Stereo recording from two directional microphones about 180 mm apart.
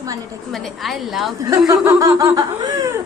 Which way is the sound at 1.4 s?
20° right (ahead or behind).